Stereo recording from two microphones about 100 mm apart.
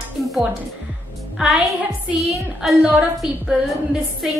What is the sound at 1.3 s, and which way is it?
A woman's voice, 5° right (ahead or behind).